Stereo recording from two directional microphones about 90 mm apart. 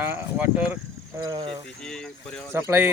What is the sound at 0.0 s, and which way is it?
Speech, 20° right (ahead or behind).